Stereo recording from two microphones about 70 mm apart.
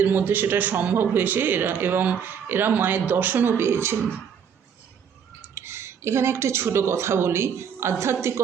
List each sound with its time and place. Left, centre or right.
0.0 s a man's voice: right
5.5 s speech: right